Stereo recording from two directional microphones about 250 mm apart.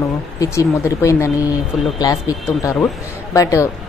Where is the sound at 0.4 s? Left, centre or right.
Centre.